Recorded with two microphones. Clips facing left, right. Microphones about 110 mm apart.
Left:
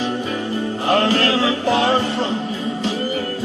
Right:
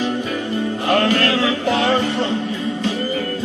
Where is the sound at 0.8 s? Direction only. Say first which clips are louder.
Even; 30° left (ahead or behind).